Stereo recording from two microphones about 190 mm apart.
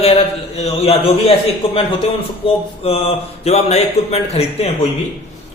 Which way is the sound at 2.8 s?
30° left (ahead or behind).